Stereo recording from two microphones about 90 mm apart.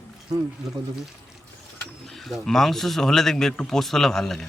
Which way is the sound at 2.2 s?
5° left (ahead or behind).